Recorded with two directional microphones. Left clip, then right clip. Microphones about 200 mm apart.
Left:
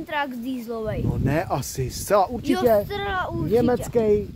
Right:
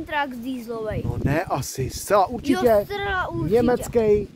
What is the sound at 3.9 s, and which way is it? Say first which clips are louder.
Speech: right 1 dB; 15° right (ahead or behind).